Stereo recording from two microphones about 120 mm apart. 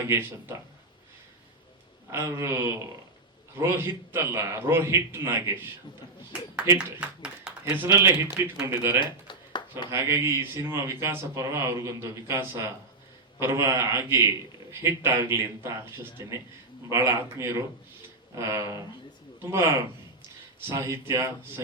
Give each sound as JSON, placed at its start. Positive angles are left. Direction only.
{"t": 0.0, "sound": "speech", "side_deg": -20}
{"t": 2.0, "sound": "speech", "side_deg": -20}
{"t": 6.7, "sound": "speech", "side_deg": -10}
{"t": 7.9, "sound": "speech", "side_deg": -25}
{"t": 9.0, "sound": "a sound", "side_deg": 40}
{"t": 9.9, "sound": "speech", "side_deg": -25}